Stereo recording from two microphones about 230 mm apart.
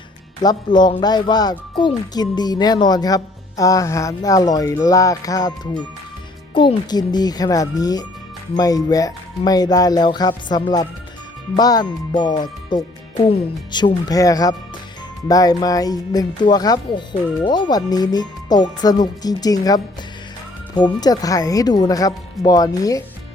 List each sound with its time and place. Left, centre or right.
0.4 s speech: centre